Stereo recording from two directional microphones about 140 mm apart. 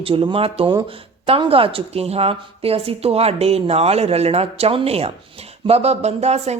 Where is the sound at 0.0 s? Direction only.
40° right (ahead or behind).